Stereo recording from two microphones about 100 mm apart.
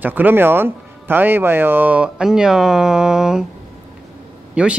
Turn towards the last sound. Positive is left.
turn(degrees=-10)  # may be behind; listen again after turning